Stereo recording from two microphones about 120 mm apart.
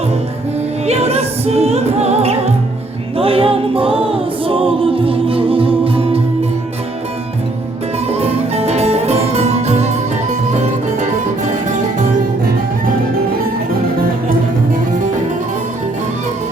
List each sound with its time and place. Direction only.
0.9 s music: 60° right (ahead or behind)
3.2 s a capella: 50° right (ahead or behind)
8.0 s music: 60° right (ahead or behind)
10.2 s music: 80° right